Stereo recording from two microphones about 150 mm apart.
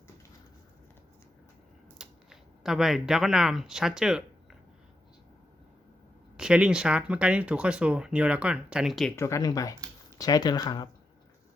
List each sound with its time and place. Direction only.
2.0 s speech: 5° right (ahead or behind)
6.3 s speech: 5° right (ahead or behind)
9.1 s speech: 20° left (ahead or behind)